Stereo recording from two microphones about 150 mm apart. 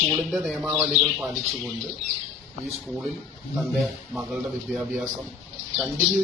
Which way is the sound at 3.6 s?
Centre (ahead or behind).